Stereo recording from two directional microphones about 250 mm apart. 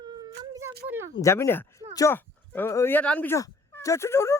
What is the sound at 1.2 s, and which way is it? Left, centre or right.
Speech, centre.